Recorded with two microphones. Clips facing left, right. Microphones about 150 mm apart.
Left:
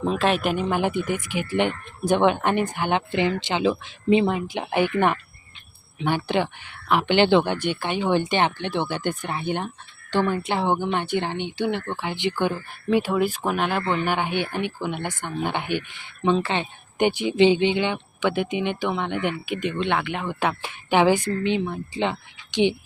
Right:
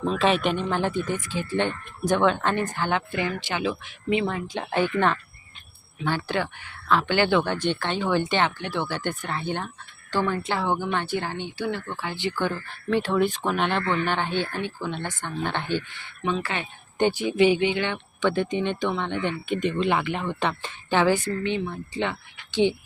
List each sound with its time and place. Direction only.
0.2 s speech: centre (ahead or behind); by 22.2 s 20° left (ahead or behind)